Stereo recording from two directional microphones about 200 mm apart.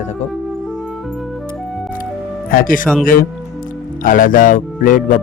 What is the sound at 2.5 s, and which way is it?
Speech, 45° left (ahead or behind).